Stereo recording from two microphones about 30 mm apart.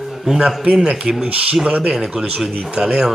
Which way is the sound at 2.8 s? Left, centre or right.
Right.